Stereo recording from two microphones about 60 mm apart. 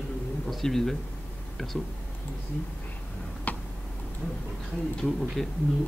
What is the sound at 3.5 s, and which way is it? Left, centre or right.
Tick-tock, left.